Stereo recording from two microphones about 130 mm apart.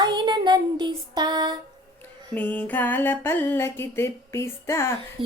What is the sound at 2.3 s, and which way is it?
Music, 10° left (ahead or behind).